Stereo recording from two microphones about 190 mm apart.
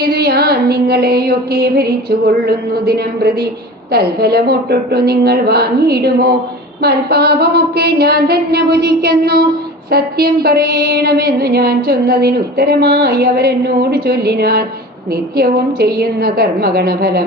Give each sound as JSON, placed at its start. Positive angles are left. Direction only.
{"t": 0.1, "sound": "music", "side_deg": -55}
{"t": 3.9, "sound": "a sound", "side_deg": -55}
{"t": 15.1, "sound": "a woman's voice", "side_deg": -55}